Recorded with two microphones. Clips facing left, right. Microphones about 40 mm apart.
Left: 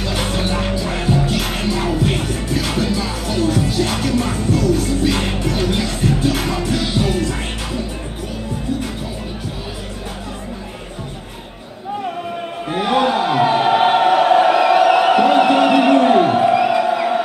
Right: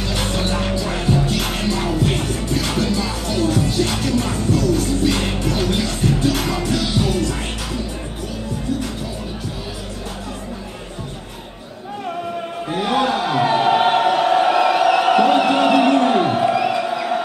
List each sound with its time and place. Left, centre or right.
0.0 s music: centre
12.6 s chant: centre